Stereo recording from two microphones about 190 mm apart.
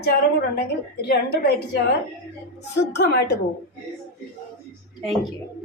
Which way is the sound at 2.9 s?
60° left (ahead or behind).